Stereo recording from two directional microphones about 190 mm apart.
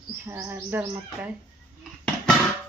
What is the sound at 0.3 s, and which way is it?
Bird, 10° right (ahead or behind).